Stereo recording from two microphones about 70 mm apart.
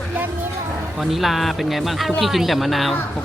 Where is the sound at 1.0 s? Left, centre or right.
Centre.